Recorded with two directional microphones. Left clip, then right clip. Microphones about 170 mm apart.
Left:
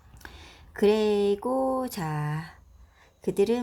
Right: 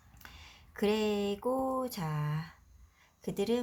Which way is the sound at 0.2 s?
35° left (ahead or behind).